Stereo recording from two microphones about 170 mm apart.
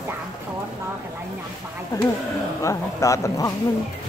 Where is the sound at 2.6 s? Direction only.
20° left (ahead or behind).